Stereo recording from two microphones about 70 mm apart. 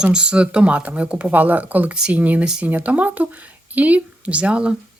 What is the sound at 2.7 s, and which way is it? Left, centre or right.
Speech, right.